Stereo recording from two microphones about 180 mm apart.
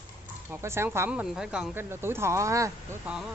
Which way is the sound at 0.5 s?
15° right (ahead or behind).